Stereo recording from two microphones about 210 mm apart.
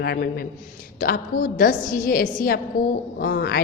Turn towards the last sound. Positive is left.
turn(degrees=50)  # may be behind; listen again after turning